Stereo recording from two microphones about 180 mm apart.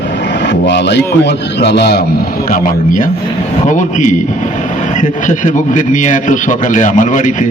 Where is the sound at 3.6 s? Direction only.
45° left (ahead or behind).